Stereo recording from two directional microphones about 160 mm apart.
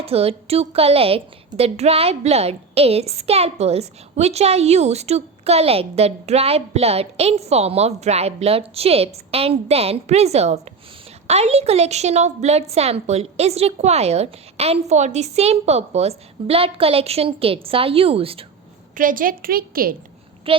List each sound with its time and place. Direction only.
0.0 s a woman's voice: 40° right (ahead or behind)
18.9 s a woman's voice: 60° right (ahead or behind)
20.5 s speech: 35° right (ahead or behind)